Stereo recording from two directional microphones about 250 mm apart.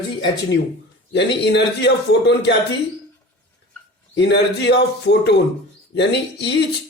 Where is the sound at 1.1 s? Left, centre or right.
Left.